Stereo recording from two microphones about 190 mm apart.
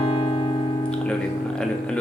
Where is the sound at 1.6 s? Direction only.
5° left (ahead or behind).